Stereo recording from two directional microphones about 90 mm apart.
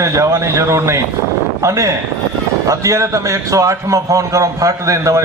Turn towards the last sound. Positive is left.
turn(degrees=-35)  # may be behind; listen again after turning